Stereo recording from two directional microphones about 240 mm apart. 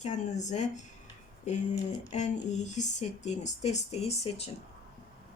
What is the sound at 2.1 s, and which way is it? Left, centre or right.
Speech, left.